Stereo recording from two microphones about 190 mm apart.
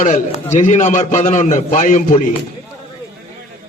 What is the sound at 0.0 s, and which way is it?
A man's voice, 35° left (ahead or behind).